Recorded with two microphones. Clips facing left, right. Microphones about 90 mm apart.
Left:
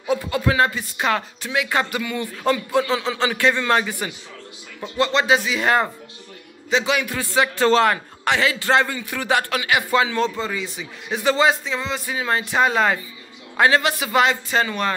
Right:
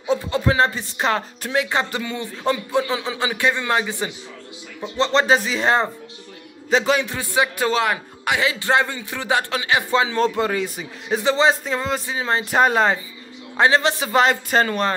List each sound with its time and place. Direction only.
0.0 s speech: 30° right (ahead or behind)
1.7 s a man's voice: 25° right (ahead or behind)
5.2 s speech: 35° right (ahead or behind)
6.9 s a man's voice: 25° right (ahead or behind)
10.3 s speech: 60° right (ahead or behind)
11.2 s a man's voice: 25° right (ahead or behind)
11.6 s a man's voice: 45° right (ahead or behind)
12.1 s a man's voice: 25° right (ahead or behind)
12.4 s speech: 40° right (ahead or behind)
13.6 s a man's voice: 25° right (ahead or behind)